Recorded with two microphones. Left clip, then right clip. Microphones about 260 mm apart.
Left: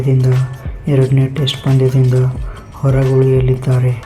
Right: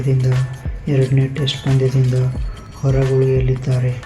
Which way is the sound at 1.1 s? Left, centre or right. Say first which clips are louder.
Left 3 dB; centre.